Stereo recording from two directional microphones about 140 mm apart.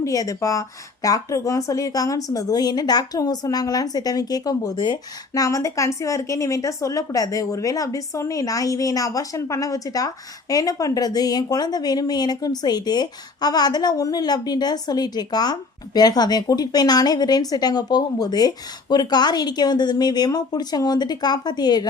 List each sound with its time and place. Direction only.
0.0 s a woman's voice: 25° left (ahead or behind)